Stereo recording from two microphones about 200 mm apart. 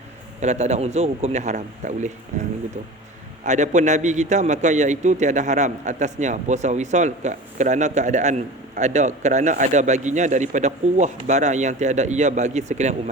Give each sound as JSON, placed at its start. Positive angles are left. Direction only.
{"t": 0.3, "sound": "a man's voice", "side_deg": -35}
{"t": 3.4, "sound": "a man's voice", "side_deg": -35}